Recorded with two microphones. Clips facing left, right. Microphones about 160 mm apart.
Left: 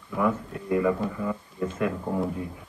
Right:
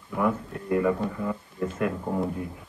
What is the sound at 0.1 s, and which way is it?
Speech, 15° right (ahead or behind).